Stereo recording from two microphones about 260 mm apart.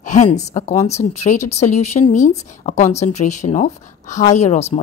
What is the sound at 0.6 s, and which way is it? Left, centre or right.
Speech, left.